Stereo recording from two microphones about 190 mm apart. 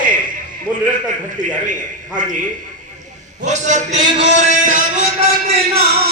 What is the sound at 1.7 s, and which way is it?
Speech, 40° right (ahead or behind).